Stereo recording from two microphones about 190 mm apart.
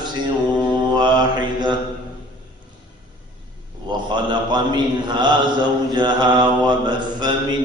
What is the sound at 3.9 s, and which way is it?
A man's voice, 25° right (ahead or behind).